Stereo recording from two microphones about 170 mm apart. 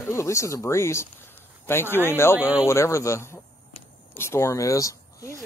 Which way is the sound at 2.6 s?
15° left (ahead or behind).